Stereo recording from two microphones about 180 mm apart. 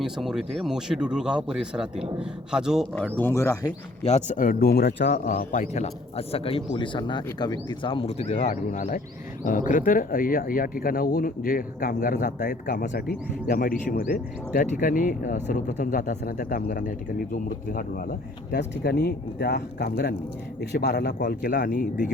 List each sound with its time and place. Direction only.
0.0 s speech: 5° right (ahead or behind)
3.2 s speech: 15° left (ahead or behind)
4.0 s speech: 40° left (ahead or behind)
18.5 s a man's voice: 65° left (ahead or behind)
21.6 s speech: 55° left (ahead or behind)